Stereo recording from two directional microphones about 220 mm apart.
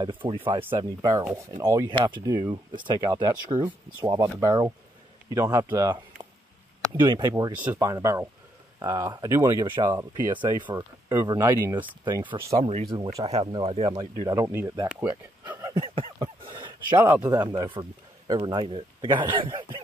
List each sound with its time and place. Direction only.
0.0 s speech: 20° right (ahead or behind)
7.5 s speech: 5° right (ahead or behind); by 14.0 s 25° right (ahead or behind)
14.2 s speech: 15° right (ahead or behind)
15.7 s a sound: 25° right (ahead or behind)
17.2 s speech: 15° right (ahead or behind)